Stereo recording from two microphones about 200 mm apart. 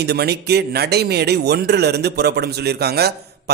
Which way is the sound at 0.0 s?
55° right (ahead or behind).